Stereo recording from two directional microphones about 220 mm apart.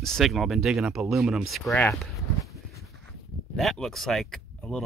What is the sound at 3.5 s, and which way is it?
Speech, centre (ahead or behind).